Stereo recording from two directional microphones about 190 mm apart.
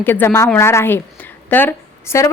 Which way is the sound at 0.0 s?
10° left (ahead or behind).